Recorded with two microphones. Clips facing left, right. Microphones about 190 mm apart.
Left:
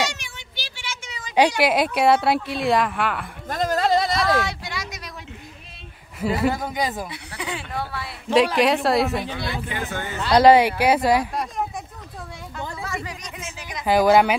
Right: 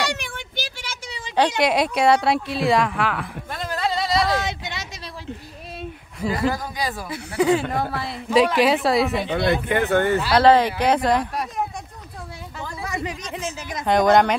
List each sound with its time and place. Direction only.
0.1 s a sound: 55° right (ahead or behind); by 1.3 s 35° right (ahead or behind)
1.6 s a woman's voice: centre (ahead or behind)
3.4 s a sound: 45° left (ahead or behind)
4.4 s a sound: 20° right (ahead or behind)
6.2 s speech: 5° left (ahead or behind)
6.5 s speech: 20° left (ahead or behind)
7.3 s speech: 45° right (ahead or behind)
8.5 s a woman's voice: centre (ahead or behind)
9.3 s speech: 55° right (ahead or behind)
10.3 s speech: 10° left (ahead or behind)
12.8 s a sound: 20° right (ahead or behind)
13.8 s a woman's voice: 5° left (ahead or behind)